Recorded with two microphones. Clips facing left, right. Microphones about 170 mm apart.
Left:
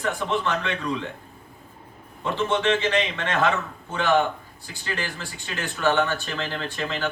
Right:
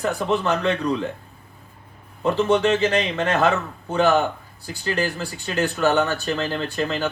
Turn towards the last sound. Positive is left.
turn(degrees=-40)  # may be behind; listen again after turning